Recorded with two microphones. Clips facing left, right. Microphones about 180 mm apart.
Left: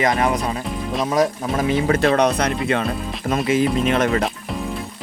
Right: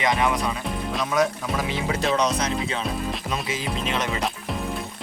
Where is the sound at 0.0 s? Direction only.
45° left (ahead or behind).